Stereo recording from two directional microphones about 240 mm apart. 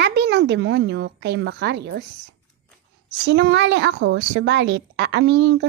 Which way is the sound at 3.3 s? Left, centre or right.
Right.